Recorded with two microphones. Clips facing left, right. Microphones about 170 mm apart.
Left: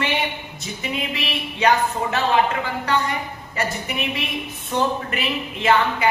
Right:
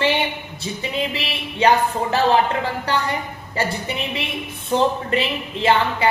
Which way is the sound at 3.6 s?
30° right (ahead or behind).